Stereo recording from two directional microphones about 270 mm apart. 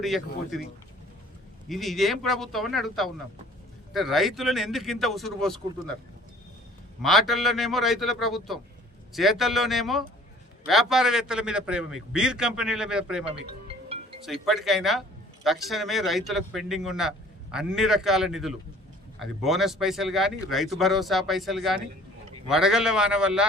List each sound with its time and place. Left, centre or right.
0.0 s speech: centre
1.6 s speech: centre
7.0 s speech: centre
13.2 s music: right
14.3 s speech: centre